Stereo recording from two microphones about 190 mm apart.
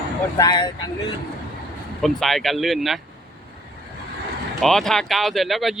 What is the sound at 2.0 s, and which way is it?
Speech, centre (ahead or behind).